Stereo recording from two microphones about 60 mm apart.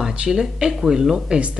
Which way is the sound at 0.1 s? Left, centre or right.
Centre.